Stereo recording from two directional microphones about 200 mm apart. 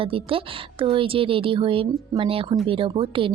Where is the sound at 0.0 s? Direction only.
25° right (ahead or behind).